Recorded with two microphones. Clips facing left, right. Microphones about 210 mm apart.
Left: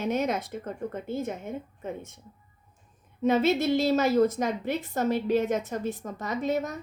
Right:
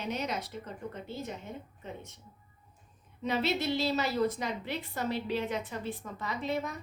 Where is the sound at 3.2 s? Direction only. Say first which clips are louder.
Left 8 dB; 45° left (ahead or behind).